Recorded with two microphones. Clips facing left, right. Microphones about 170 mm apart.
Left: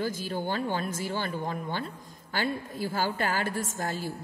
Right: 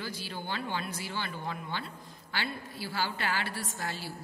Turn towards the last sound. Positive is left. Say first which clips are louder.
# left 5 dB
turn(degrees=45)  # may be behind; listen again after turning